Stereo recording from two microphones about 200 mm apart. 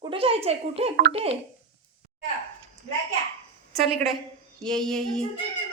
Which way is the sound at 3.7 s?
Centre (ahead or behind).